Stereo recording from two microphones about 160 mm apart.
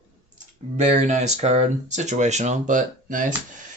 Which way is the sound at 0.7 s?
45° right (ahead or behind).